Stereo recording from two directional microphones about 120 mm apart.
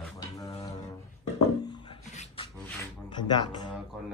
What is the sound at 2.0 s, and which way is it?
Beatboxing, 75° left (ahead or behind).